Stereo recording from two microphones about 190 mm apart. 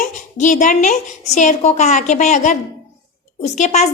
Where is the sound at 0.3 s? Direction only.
40° left (ahead or behind).